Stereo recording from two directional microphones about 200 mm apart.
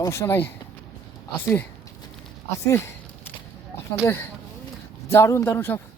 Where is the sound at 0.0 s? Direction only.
15° left (ahead or behind).